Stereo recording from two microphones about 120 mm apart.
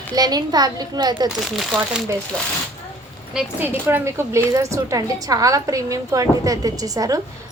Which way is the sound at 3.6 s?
20° right (ahead or behind).